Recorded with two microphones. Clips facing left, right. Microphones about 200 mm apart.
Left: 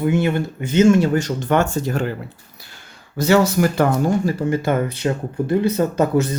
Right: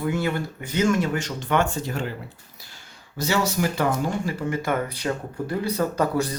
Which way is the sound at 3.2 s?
55° left (ahead or behind).